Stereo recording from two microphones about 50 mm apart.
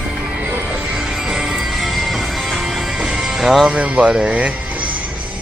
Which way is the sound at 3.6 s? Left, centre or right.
Right.